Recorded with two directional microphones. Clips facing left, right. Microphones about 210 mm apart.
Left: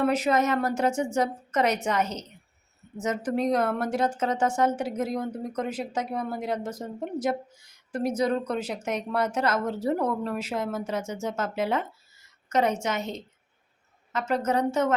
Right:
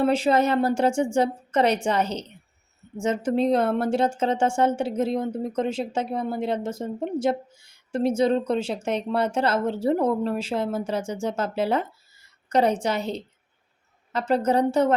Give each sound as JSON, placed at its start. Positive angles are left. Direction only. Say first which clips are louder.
{"t": 0.0, "sound": "a woman's voice", "louder": "right 3 dB", "side_deg": -30}